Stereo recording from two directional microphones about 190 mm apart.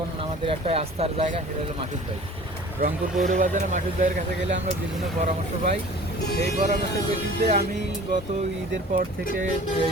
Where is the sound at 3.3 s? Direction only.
40° right (ahead or behind).